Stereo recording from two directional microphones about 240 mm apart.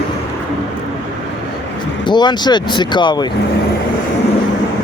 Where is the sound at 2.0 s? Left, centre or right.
Centre.